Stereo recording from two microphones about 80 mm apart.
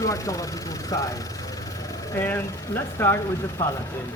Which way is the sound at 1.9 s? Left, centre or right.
Left.